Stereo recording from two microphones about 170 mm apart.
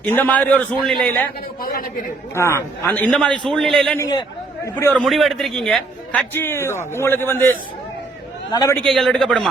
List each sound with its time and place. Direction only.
0.0 s a man's voice: 10° left (ahead or behind)
1.6 s speech: 55° left (ahead or behind)
2.3 s a man's voice: 15° left (ahead or behind)
3.9 s a man's voice: 20° left (ahead or behind)
4.7 s a man's voice: 10° left (ahead or behind)
8.5 s a man's voice: 20° left (ahead or behind)
8.8 s a man's voice: centre (ahead or behind)